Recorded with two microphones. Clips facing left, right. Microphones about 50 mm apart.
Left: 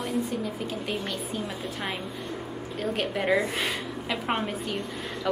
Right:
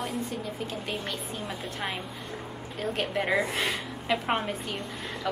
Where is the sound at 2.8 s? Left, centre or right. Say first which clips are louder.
Left 1 dB; centre.